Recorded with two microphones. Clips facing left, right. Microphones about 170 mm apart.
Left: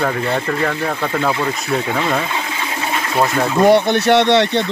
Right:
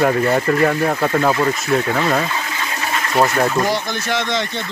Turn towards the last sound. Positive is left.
turn(degrees=70)  # may be behind; listen again after turning